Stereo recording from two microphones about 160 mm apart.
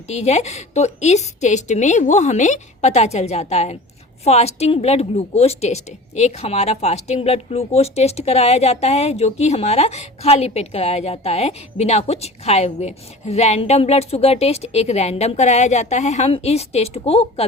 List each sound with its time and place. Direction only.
0.1 s a woman's voice: 40° left (ahead or behind)